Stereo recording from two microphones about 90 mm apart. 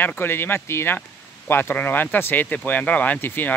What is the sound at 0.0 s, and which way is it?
Speech, 25° left (ahead or behind).